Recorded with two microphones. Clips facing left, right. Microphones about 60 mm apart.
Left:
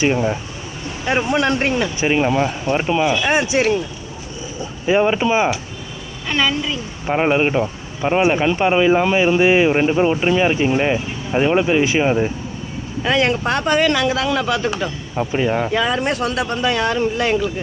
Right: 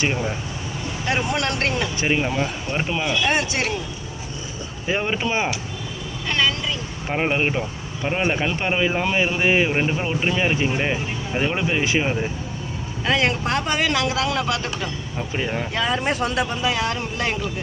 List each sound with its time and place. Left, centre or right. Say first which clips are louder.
0.0 s speech: left 6 dB; centre
2.2 s speech: left 6 dB; centre
4.9 s speech: left 8 dB; centre
12.0 s speech: left 7 dB; centre
13.1 s speech: left 4 dB; centre
15.3 s speech: left 7 dB; centre
15.7 s speech: left 4 dB; centre